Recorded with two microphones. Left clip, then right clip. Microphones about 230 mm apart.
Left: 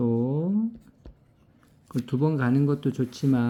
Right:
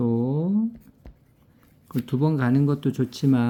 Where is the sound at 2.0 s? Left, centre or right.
Centre.